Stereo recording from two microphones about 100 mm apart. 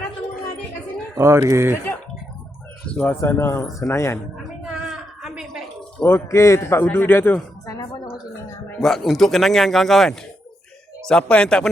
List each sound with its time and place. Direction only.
1.1 s speech: 30° right (ahead or behind)
2.9 s a man's voice: 20° left (ahead or behind)
4.6 s a sound: 5° right (ahead or behind)
6.0 s a man's voice: 20° left (ahead or behind)
7.7 s a sound: 35° left (ahead or behind)
8.8 s a man's voice: centre (ahead or behind)